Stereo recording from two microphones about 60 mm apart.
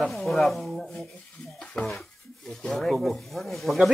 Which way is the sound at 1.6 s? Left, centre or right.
Centre.